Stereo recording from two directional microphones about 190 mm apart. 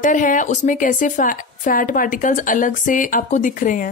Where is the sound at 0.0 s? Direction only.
45° left (ahead or behind).